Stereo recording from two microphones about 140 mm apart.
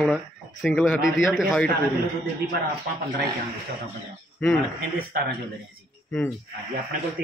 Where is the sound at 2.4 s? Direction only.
90° right.